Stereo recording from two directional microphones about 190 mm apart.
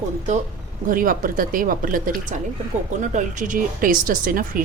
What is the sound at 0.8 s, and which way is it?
Speech, 45° right (ahead or behind).